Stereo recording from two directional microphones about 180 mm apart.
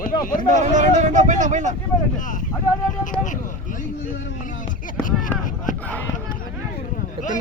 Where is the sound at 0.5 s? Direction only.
40° right (ahead or behind).